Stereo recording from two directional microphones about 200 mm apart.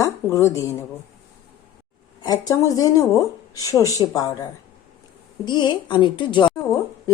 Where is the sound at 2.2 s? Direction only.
20° left (ahead or behind).